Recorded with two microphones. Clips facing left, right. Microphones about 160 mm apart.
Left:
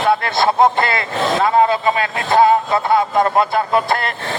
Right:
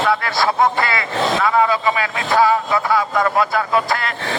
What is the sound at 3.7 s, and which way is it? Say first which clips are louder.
Speech: left 2 dB; 55° left (ahead or behind).